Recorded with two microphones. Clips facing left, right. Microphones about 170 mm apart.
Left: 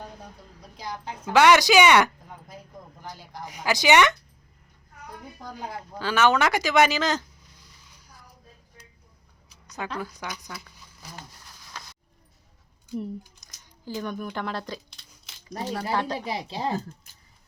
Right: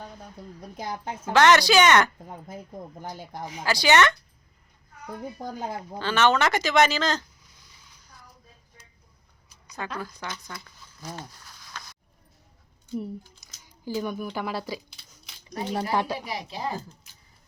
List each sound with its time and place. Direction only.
0.8 s a woman's voice: 50° right (ahead or behind)
1.3 s speech: 10° left (ahead or behind)
3.6 s speech: 15° left (ahead or behind)
6.0 s speech: 10° left (ahead or behind)
10.0 s speech: 15° left (ahead or behind)
13.8 s speech: 10° right (ahead or behind)
15.4 s speech: 20° right (ahead or behind)
16.2 s a woman's voice: 30° left (ahead or behind)